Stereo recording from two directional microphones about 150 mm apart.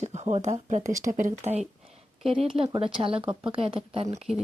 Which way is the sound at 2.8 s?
40° right (ahead or behind).